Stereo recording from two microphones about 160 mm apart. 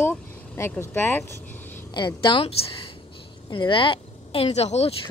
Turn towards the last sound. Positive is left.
turn(degrees=40)  # may be behind; listen again after turning